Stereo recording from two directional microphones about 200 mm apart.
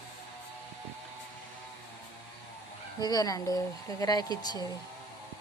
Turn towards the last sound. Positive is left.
turn(degrees=20)  # may be behind; listen again after turning